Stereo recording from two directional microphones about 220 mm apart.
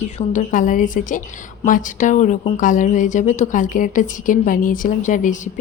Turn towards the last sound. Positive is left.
turn(degrees=35)  # may be behind; listen again after turning